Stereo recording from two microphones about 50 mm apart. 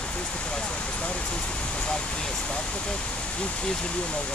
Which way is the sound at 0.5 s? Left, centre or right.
Left.